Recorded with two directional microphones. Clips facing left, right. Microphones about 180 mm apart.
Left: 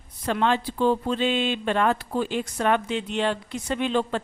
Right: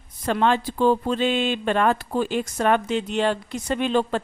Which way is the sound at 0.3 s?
45° right (ahead or behind).